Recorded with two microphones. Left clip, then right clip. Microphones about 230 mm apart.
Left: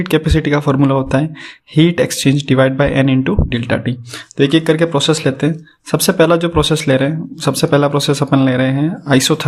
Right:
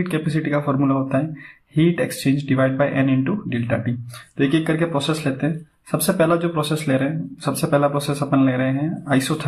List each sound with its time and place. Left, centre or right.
0.0 s speech: left